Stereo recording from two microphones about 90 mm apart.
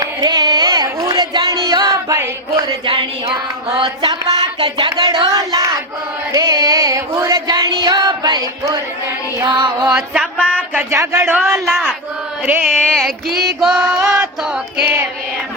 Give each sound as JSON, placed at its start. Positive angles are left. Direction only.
{"t": 0.0, "sound": "carnatic music", "side_deg": -50}
{"t": 2.8, "sound": "speech", "side_deg": -75}
{"t": 3.8, "sound": "music", "side_deg": -90}
{"t": 4.1, "sound": "speech", "side_deg": -50}
{"t": 5.0, "sound": "speech", "side_deg": -40}
{"t": 6.3, "sound": "music", "side_deg": -40}
{"t": 9.5, "sound": "music", "side_deg": -60}
{"t": 10.3, "sound": "a sound", "side_deg": 15}
{"t": 10.8, "sound": "speech", "side_deg": -30}
{"t": 11.3, "sound": "a sound", "side_deg": -5}
{"t": 11.7, "sound": "chant", "side_deg": 5}
{"t": 12.7, "sound": "a sound", "side_deg": 5}
{"t": 13.6, "sound": "music", "side_deg": -5}